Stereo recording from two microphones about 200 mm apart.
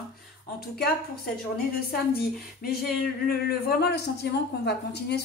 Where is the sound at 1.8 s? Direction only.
50° left (ahead or behind).